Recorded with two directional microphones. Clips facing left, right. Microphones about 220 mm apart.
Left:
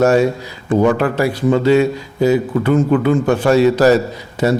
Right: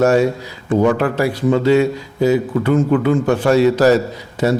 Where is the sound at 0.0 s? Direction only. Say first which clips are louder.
Left 1 dB; 15° left (ahead or behind).